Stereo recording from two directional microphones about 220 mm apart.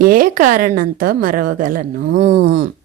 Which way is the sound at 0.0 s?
40° right (ahead or behind).